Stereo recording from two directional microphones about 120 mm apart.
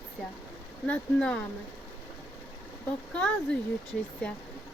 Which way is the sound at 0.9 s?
10° left (ahead or behind).